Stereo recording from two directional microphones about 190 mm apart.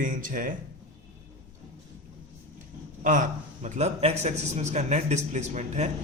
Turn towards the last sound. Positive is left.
turn(degrees=-40)  # may be behind; listen again after turning